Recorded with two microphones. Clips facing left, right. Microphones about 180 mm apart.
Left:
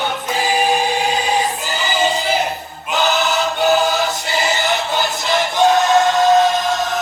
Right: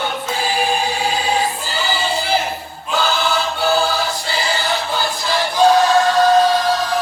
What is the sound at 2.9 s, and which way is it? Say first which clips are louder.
Choir: left 1 dB; 20° left (ahead or behind).